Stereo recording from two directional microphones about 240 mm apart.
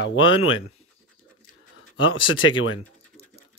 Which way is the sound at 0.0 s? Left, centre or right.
Left.